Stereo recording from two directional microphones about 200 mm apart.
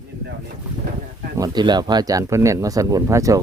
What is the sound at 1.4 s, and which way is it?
Speech, 20° right (ahead or behind).